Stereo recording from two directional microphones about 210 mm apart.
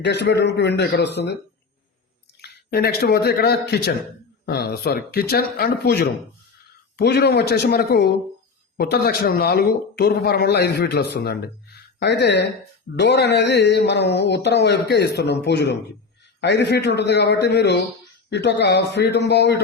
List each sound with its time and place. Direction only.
0.0 s a man's voice: 55° left (ahead or behind)
2.4 s a man's voice: 50° left (ahead or behind)